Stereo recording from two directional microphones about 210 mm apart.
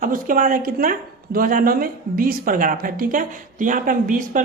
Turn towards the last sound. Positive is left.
turn(degrees=-40)  # may be behind; listen again after turning